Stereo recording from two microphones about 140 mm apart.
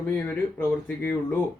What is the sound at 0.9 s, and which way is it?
Speech, 10° left (ahead or behind).